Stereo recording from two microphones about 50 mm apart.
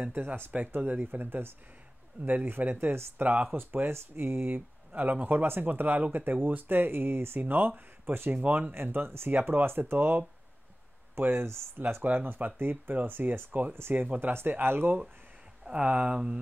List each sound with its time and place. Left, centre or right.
0.5 s speech: right
2.9 s speech: right
4.4 s speech: right
9.3 s speech: right
11.1 s speech: right
12.0 s speech: right
14.2 s speech: right
15.6 s speech: right